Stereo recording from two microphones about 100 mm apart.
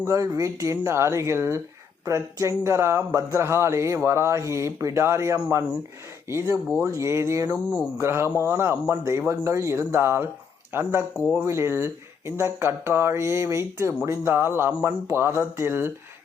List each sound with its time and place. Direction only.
0.0 s speech: 30° right (ahead or behind)